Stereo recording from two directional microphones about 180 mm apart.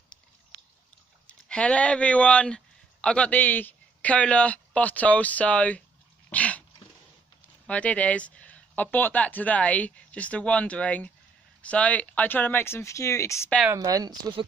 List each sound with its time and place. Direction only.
1.2 s speech: 5° left (ahead or behind)
6.3 s dog: 5° left (ahead or behind)
7.6 s speech: 5° left (ahead or behind)
13.7 s speech: 20° right (ahead or behind)